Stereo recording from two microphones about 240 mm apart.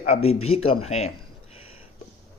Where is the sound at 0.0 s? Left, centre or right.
Left.